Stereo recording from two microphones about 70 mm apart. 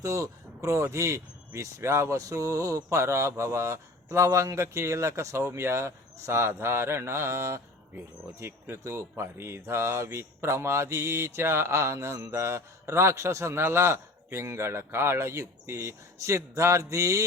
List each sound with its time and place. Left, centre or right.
0.0 s speech: right